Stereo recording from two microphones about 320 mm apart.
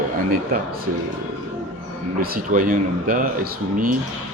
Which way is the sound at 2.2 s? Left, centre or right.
Right.